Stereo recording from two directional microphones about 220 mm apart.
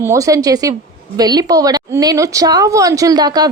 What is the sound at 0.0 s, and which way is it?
A woman's voice, 15° right (ahead or behind).